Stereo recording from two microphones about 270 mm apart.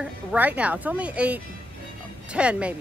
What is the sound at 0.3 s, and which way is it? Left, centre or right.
Speech, centre.